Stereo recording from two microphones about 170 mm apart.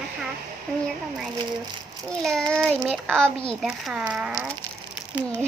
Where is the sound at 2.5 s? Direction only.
5° left (ahead or behind).